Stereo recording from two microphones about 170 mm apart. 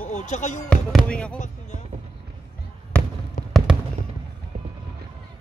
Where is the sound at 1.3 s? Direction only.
45° left (ahead or behind).